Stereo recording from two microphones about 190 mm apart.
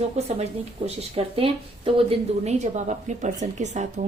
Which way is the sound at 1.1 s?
30° right (ahead or behind).